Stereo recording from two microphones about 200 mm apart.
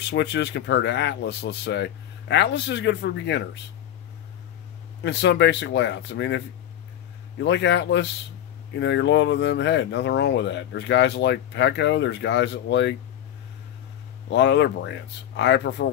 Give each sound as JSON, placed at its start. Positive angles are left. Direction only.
{"t": 0.0, "sound": "speech", "side_deg": 60}
{"t": 5.0, "sound": "speech", "side_deg": 60}
{"t": 14.3, "sound": "speech", "side_deg": 60}